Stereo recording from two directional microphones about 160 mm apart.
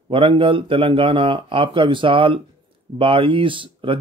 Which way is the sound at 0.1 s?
30° right (ahead or behind).